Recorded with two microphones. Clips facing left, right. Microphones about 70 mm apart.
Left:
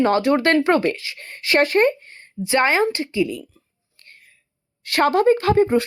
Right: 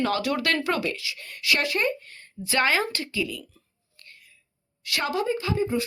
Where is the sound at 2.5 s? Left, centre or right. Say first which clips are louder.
Left 6 dB; left.